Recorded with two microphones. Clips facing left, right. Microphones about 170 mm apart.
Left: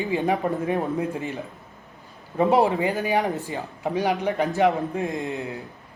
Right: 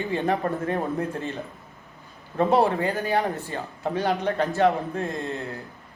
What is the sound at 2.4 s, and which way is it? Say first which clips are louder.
Speech: left 1 dB; 15° left (ahead or behind).